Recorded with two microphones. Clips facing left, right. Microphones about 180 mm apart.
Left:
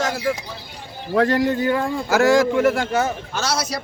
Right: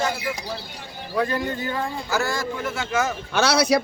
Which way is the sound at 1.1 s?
85° left.